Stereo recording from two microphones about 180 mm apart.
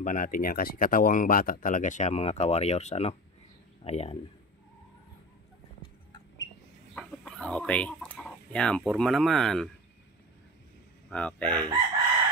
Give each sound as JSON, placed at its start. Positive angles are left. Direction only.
{"t": 0.0, "sound": "speech", "side_deg": 50}
{"t": 7.0, "sound": "chicken", "side_deg": 5}
{"t": 11.1, "sound": "speech", "side_deg": 5}